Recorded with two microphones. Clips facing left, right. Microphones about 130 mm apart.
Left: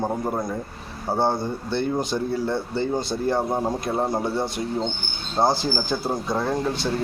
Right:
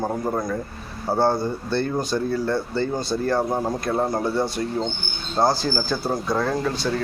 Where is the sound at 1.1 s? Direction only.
20° left (ahead or behind).